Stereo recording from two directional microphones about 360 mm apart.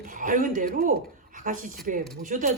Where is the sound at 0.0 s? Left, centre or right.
Right.